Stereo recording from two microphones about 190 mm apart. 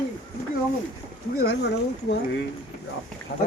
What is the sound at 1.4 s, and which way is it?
Speech, 60° left (ahead or behind).